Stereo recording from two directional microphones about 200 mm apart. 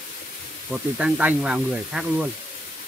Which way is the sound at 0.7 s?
5° right (ahead or behind).